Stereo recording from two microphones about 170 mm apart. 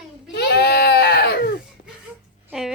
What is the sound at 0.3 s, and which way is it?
Baby cry, 70° left (ahead or behind).